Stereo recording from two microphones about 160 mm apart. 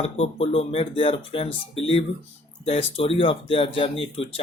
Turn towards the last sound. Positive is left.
turn(degrees=35)  # may be behind; listen again after turning